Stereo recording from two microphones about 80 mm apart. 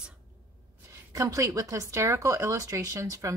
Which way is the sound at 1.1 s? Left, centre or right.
Right.